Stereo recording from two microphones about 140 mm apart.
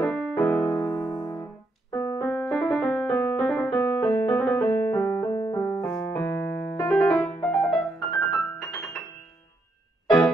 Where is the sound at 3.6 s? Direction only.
20° left (ahead or behind).